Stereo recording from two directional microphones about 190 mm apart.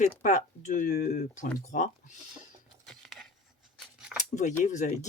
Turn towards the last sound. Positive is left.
turn(degrees=40)  # may be behind; listen again after turning